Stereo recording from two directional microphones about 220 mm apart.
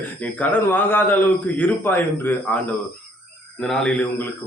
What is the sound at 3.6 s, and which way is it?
Speech, 5° left (ahead or behind).